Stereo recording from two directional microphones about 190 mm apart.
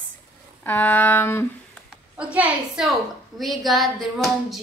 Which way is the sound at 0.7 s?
10° left (ahead or behind).